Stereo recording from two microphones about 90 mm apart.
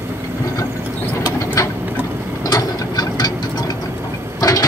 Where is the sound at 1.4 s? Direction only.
35° left (ahead or behind).